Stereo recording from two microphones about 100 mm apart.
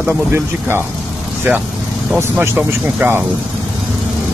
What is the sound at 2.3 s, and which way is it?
Speech, 15° right (ahead or behind).